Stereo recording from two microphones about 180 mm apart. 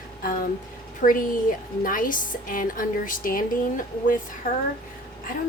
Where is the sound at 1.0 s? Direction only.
50° left (ahead or behind).